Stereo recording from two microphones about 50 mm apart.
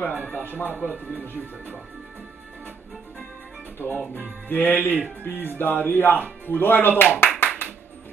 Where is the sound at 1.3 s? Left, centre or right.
Right.